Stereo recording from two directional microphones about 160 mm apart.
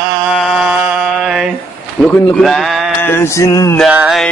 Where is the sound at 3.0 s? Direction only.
15° left (ahead or behind).